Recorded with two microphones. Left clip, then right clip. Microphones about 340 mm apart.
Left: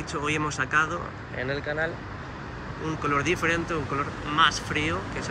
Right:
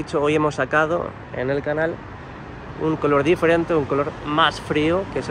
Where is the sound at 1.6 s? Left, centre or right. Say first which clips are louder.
Right 5 dB; right.